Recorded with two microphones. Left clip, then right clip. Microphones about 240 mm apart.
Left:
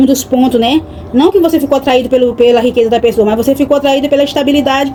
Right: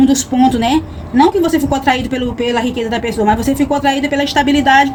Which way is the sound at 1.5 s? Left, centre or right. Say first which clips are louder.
Left 4 dB; centre.